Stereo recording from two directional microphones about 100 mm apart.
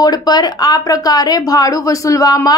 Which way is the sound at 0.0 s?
40° left (ahead or behind).